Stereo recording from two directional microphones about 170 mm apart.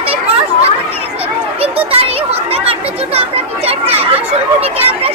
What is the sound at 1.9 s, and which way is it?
Children playing, 35° right (ahead or behind).